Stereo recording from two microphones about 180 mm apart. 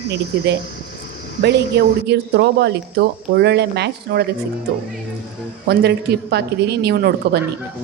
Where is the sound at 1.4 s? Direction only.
70° right (ahead or behind).